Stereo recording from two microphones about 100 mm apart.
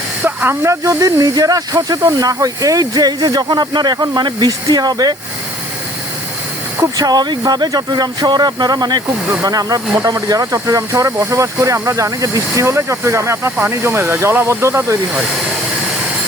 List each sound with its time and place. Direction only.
0.3 s speech: 25° right (ahead or behind); by 5.1 s 40° right (ahead or behind)
7.0 s speech: 40° right (ahead or behind)